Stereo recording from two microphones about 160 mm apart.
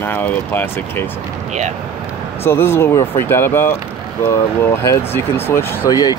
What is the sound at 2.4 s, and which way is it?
Speech, 15° left (ahead or behind).